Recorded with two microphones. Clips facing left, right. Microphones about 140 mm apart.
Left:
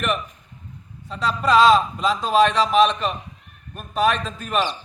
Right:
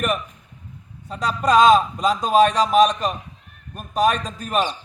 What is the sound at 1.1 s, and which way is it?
A man's voice, 45° right (ahead or behind).